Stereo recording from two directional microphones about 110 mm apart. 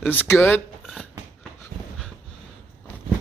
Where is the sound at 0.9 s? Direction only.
5° left (ahead or behind).